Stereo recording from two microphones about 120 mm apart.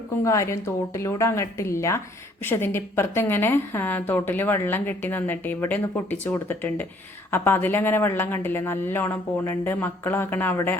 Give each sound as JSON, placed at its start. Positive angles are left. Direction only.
{"t": 0.3, "sound": "a woman's voice", "side_deg": 25}